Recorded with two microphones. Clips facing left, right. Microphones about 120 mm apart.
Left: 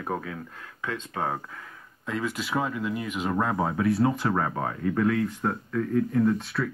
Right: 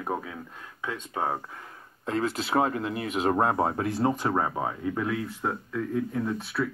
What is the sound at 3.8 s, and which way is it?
Speech, 25° right (ahead or behind).